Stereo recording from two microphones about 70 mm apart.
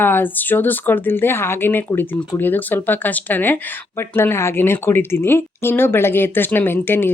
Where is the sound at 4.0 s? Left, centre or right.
Left.